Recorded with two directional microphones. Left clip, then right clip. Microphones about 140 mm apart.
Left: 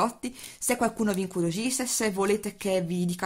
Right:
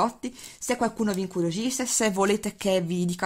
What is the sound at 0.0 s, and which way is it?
A woman's voice, 10° right (ahead or behind).